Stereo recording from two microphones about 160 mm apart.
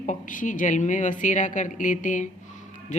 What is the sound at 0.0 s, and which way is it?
A man's voice, 50° left (ahead or behind).